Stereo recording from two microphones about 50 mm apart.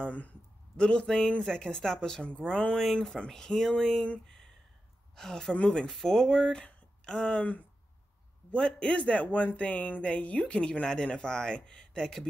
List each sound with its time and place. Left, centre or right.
0.0 s speech: left; by 4.1 s centre
5.1 s speech: centre